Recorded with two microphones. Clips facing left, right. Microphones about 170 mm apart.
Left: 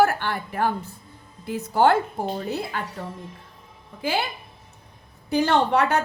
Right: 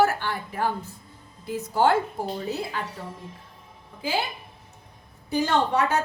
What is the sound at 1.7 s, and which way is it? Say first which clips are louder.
Speech: left 3 dB; 60° left (ahead or behind).